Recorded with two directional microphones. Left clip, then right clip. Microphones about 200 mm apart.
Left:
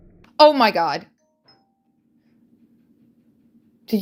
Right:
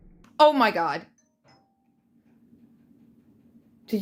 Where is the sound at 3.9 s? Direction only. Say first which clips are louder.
Left 5 dB; 35° left (ahead or behind).